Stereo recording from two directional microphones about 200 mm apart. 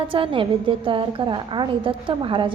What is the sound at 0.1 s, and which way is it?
A woman's voice, 25° right (ahead or behind).